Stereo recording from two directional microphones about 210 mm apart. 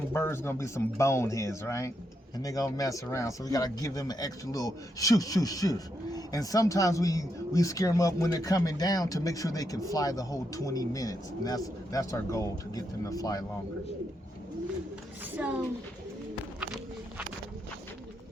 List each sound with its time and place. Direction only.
0.1 s speech: 10° left (ahead or behind)
15.4 s a child's voice: 5° right (ahead or behind)
16.6 s walk: 5° right (ahead or behind)